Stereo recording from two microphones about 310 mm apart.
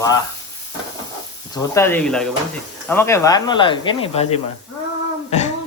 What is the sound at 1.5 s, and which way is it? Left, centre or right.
Speech, centre.